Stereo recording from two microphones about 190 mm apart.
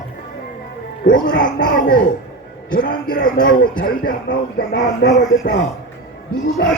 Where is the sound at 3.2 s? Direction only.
45° left (ahead or behind).